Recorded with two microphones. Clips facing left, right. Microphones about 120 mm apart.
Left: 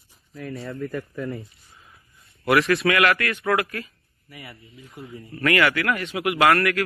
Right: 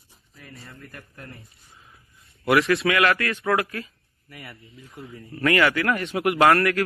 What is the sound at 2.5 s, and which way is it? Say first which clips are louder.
Speech: left 1 dB; centre (ahead or behind).